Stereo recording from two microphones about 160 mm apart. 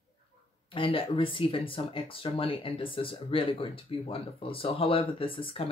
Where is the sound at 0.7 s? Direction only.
35° left (ahead or behind).